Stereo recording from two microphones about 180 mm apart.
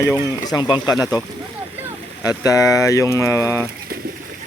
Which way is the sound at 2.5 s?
20° left (ahead or behind).